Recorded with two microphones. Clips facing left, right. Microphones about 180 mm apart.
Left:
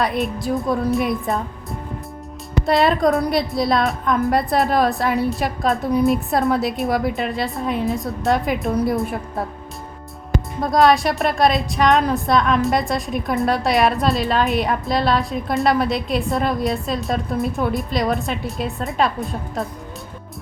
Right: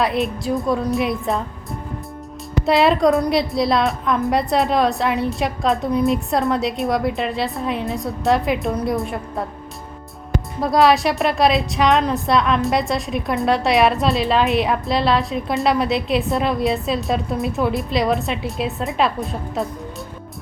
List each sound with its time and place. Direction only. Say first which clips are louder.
0.0 s a woman's voice: right 1 dB; centre (ahead or behind)
2.6 s a woman's voice: right 2 dB; centre (ahead or behind)
10.6 s a woman's voice: even; centre (ahead or behind)